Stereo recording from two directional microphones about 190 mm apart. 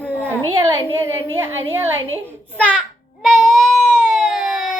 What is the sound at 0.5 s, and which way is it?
A child's voice, 15° right (ahead or behind).